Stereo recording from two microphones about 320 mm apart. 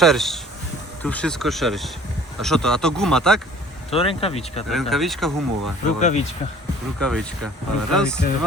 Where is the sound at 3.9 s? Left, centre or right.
Centre.